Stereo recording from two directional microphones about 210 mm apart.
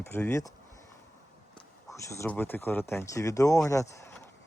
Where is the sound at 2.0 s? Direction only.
10° left (ahead or behind).